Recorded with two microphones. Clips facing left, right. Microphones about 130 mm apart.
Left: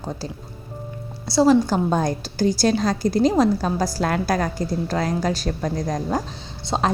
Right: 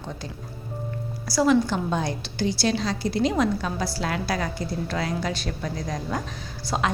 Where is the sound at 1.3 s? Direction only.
30° left (ahead or behind).